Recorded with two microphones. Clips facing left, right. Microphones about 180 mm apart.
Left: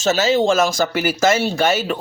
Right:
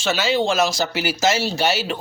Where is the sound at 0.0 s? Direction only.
40° left (ahead or behind).